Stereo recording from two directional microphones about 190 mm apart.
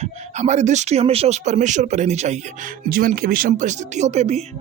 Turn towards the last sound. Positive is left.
turn(degrees=-35)  # may be behind; listen again after turning